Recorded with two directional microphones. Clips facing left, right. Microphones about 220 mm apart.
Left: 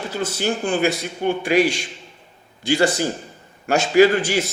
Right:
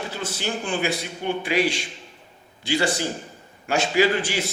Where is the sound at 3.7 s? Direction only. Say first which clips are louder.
Left 6 dB; 45° left (ahead or behind).